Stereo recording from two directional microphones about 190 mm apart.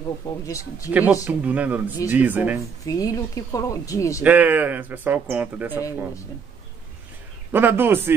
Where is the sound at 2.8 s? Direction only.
20° left (ahead or behind).